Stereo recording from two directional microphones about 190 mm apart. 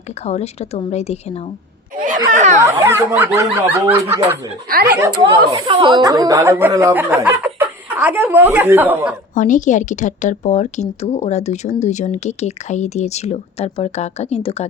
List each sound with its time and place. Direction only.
0.3 s speech: 35° left (ahead or behind)
2.3 s speech: 40° right (ahead or behind)
2.6 s speech: 15° right (ahead or behind)
9.3 s speech: 40° left (ahead or behind)